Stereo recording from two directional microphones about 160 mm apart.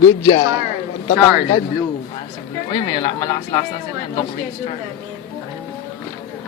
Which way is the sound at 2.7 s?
30° left (ahead or behind).